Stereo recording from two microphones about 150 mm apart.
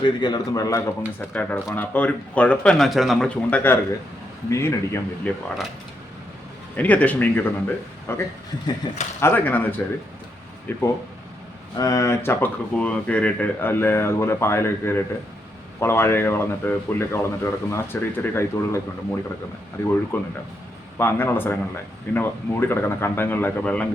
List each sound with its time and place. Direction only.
0.0 s speech: 30° left (ahead or behind)
6.7 s speech: 10° left (ahead or behind)
20.1 s speech: 15° left (ahead or behind)